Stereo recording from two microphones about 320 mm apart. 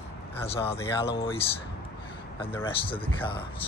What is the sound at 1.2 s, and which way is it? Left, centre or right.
Speech, centre.